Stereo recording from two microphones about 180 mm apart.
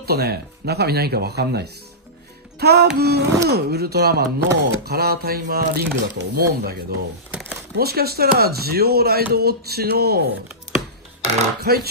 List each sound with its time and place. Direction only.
0.0 s speech: 60° right (ahead or behind)
2.6 s music: 60° right (ahead or behind)
3.0 s speech: 65° right (ahead or behind)
11.6 s speech: 60° right (ahead or behind)